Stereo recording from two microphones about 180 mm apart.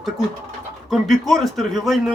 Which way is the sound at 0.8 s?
Centre (ahead or behind).